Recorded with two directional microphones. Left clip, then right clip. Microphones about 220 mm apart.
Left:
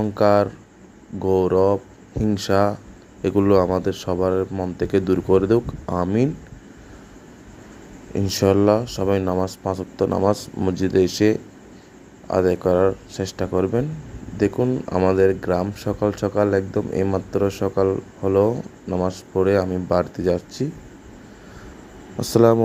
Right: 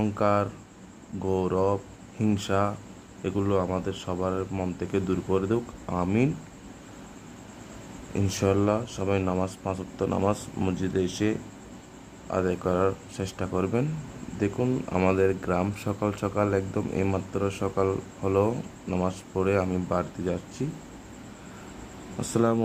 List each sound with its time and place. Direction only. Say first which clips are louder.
0.1 s speech: left 11 dB; 15° left (ahead or behind)
8.1 s speech: left 7 dB; 15° left (ahead or behind)
12.3 s speech: left 8 dB; 15° left (ahead or behind)
22.2 s speech: left 10 dB; 20° left (ahead or behind)